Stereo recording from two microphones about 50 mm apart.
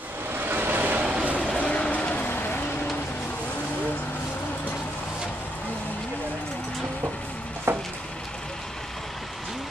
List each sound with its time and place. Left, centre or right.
0.3 s vehicle: right
1.6 s train: left
2.2 s vehicle: left
7.7 s a sound: right